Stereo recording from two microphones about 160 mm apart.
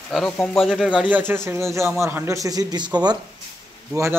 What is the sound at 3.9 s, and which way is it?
Speech, 15° right (ahead or behind).